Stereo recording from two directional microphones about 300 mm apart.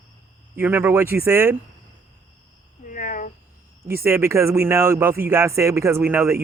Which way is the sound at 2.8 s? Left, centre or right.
Left.